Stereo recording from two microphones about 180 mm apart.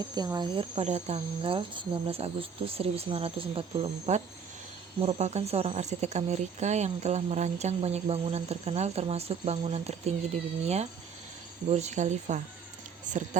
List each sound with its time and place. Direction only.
0.1 s speech: 20° right (ahead or behind)
0.9 s speech: 40° right (ahead or behind)